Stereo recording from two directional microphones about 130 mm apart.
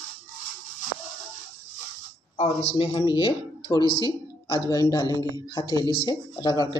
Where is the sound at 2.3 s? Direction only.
45° left (ahead or behind).